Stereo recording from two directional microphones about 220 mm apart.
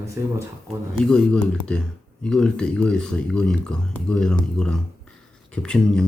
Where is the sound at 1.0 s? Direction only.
5° left (ahead or behind).